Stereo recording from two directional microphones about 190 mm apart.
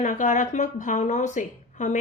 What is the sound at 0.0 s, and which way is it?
A woman's voice, 40° left (ahead or behind).